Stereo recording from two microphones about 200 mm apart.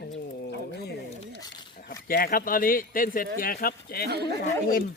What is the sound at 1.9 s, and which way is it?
Speech, 45° left (ahead or behind).